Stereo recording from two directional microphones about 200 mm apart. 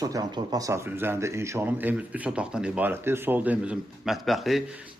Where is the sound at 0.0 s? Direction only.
20° right (ahead or behind).